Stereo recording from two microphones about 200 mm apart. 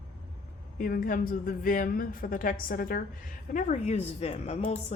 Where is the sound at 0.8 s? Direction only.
45° left (ahead or behind).